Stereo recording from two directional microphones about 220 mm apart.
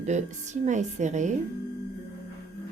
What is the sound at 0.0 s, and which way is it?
Speech, 30° right (ahead or behind).